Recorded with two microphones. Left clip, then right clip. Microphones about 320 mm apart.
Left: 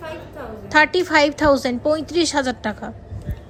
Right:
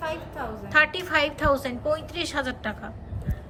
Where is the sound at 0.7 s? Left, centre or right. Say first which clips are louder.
Left 6 dB; centre.